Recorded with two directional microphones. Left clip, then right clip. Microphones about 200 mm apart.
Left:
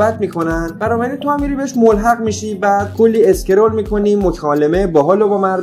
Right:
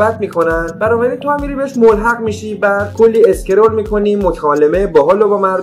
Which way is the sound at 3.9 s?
40° left (ahead or behind).